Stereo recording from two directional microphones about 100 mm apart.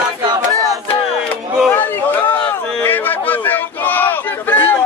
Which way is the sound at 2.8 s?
20° left (ahead or behind).